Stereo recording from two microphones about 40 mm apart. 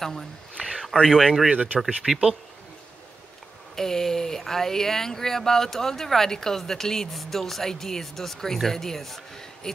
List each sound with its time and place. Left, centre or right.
0.0 s speech: centre
0.6 s a sound: centre
1.0 s speech: centre
1.5 s speech: right
2.0 s speech: centre
3.7 s speech: centre